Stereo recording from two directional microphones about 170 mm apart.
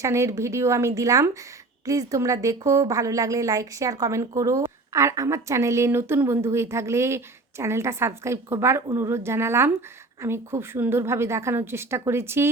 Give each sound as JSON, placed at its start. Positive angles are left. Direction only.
{"t": 0.0, "sound": "a woman's voice", "side_deg": -15}